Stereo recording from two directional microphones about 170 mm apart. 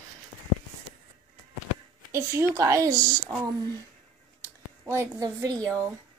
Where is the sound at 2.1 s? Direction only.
15° right (ahead or behind).